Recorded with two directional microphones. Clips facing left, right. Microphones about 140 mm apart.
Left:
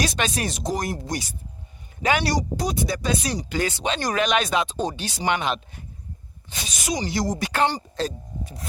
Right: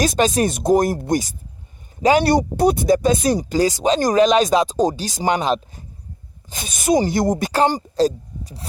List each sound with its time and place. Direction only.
0.0 s speech: 45° right (ahead or behind)
2.2 s speech: 55° right (ahead or behind); by 5.8 s 35° right (ahead or behind)
6.5 s speech: 50° right (ahead or behind)
7.5 s speech: 40° right (ahead or behind)